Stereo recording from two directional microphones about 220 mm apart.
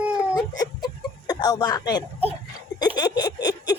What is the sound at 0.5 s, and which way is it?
Chicken, 15° left (ahead or behind).